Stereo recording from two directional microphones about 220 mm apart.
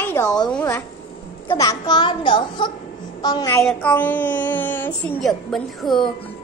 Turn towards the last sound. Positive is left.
turn(degrees=0)  # may be behind; listen again after turning